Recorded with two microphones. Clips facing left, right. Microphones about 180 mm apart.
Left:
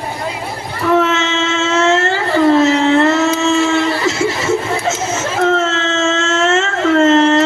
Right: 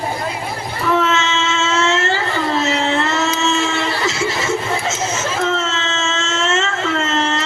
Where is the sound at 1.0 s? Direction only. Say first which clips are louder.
Left 3 dB; 60° left (ahead or behind).